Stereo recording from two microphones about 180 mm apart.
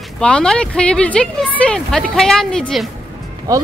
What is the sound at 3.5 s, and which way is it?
Speech, 20° right (ahead or behind).